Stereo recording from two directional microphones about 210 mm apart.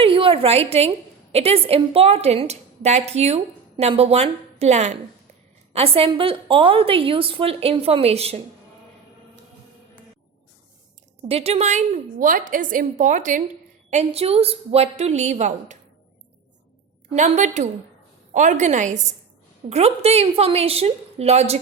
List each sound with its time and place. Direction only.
0.0 s a sound: 25° right (ahead or behind)
1.3 s a woman's voice: 30° right (ahead or behind)
11.3 s a woman's voice: 30° right (ahead or behind)
17.2 s a woman's voice: 35° right (ahead or behind)